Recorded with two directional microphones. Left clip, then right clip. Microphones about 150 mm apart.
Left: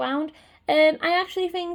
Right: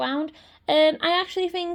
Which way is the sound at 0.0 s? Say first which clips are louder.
Even; 35° right (ahead or behind).